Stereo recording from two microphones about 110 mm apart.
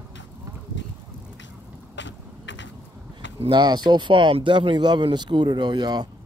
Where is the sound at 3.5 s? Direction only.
40° right (ahead or behind).